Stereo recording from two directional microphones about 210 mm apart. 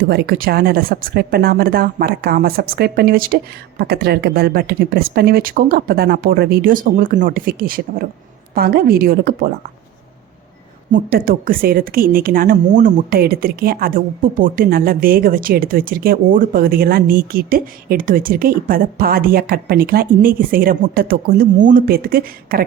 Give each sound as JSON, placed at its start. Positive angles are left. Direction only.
{"t": 0.1, "sound": "a woman's voice", "side_deg": -50}
{"t": 10.9, "sound": "a woman's voice", "side_deg": -40}